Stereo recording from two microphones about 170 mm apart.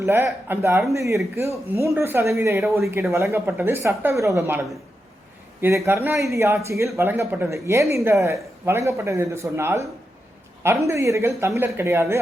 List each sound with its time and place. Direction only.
0.0 s speech: 15° right (ahead or behind)